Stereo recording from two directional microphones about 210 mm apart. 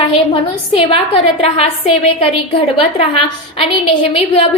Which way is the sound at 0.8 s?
25° left (ahead or behind).